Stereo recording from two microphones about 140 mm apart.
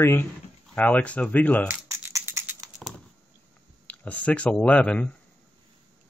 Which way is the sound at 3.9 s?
10° left (ahead or behind).